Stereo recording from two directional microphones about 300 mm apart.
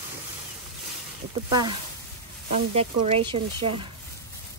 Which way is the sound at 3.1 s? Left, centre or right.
Centre.